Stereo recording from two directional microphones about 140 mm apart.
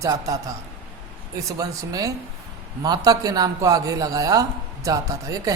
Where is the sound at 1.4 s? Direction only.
25° right (ahead or behind).